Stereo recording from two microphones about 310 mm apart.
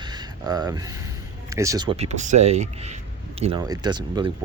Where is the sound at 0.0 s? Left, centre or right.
Centre.